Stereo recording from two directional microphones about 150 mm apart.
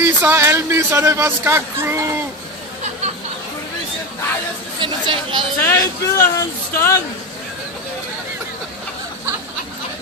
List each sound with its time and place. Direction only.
0.0 s speech: 15° right (ahead or behind)
4.7 s speech: 35° right (ahead or behind)
5.6 s speech: 15° left (ahead or behind)